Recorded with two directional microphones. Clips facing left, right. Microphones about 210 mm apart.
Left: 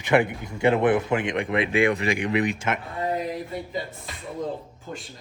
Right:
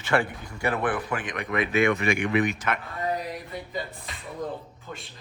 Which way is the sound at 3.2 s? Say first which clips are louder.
Left 5 dB; 25° left (ahead or behind).